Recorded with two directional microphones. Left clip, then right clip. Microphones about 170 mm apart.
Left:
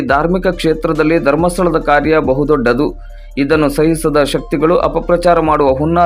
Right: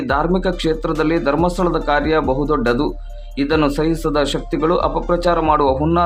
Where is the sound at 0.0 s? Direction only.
20° left (ahead or behind).